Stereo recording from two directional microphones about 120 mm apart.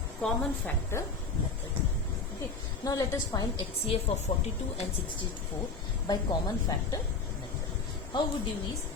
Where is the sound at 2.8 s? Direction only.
30° left (ahead or behind).